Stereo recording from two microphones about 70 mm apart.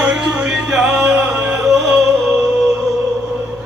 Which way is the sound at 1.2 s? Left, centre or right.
Centre.